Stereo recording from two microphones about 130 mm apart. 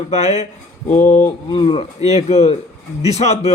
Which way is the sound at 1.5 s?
40° left (ahead or behind).